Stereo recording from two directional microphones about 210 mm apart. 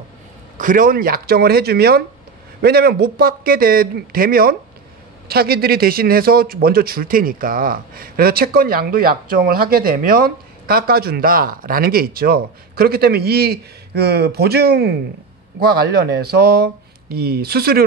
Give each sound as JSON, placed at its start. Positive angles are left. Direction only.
{"t": 0.6, "sound": "speech", "side_deg": -40}